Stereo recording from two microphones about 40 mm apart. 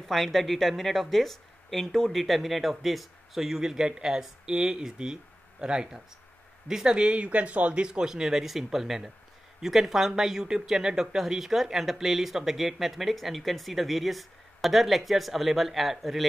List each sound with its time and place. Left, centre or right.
0.1 s speech: centre; by 7.2 s right
7.2 s speech: right
8.1 s speech: centre